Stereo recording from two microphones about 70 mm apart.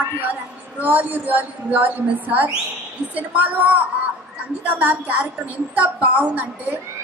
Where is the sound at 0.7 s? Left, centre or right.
Right.